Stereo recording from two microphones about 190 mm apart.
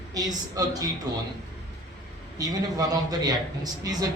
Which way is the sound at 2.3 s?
20° right (ahead or behind).